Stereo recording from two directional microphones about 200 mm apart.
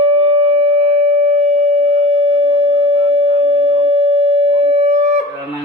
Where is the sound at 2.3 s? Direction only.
30° right (ahead or behind).